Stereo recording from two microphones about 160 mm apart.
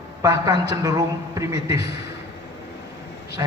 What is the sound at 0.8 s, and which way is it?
Speech, 20° right (ahead or behind).